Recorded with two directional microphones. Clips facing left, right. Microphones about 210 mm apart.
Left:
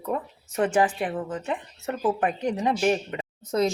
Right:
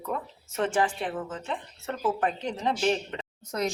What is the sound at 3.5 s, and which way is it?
Speech, 30° left (ahead or behind).